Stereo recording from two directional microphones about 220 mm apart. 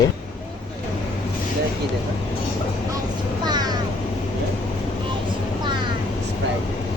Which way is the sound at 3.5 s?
20° right (ahead or behind).